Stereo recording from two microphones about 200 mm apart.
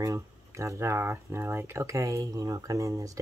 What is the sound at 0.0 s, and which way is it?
Speech, 15° right (ahead or behind).